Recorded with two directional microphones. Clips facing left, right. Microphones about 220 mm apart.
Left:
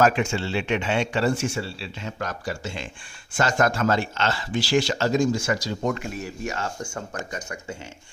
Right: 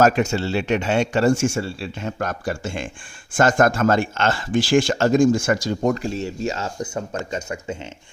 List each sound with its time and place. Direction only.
0.0 s speech: 40° right (ahead or behind)
6.0 s speech: 30° right (ahead or behind)